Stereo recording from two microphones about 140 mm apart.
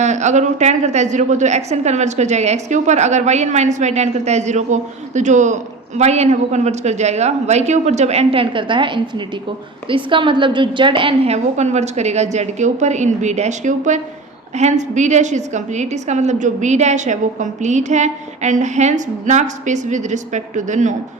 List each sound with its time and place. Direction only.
0.0 s a woman's voice: 55° right (ahead or behind)